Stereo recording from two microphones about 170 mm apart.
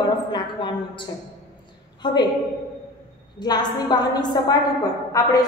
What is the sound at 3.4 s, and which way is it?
A woman's voice, 25° left (ahead or behind).